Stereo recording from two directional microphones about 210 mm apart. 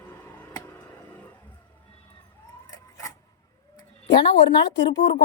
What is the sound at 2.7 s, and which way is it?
Printer, 15° left (ahead or behind).